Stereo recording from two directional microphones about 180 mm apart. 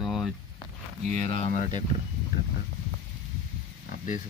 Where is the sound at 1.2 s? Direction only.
30° left (ahead or behind).